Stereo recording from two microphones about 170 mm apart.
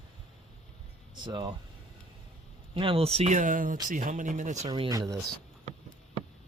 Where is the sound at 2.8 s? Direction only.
35° right (ahead or behind).